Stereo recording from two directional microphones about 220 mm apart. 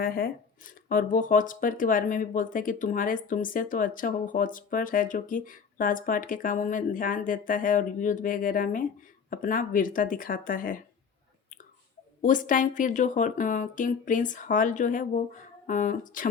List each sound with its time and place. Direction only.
0.0 s speech: 40° left (ahead or behind)
12.2 s speech: 35° left (ahead or behind)